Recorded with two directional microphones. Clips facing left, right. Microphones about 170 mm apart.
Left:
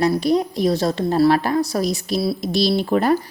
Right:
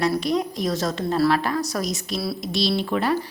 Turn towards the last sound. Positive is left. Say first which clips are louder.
# left 5 dB
turn(degrees=45)  # may be behind; listen again after turning